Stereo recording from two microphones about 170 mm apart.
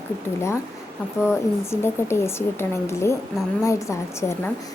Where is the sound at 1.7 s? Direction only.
15° left (ahead or behind).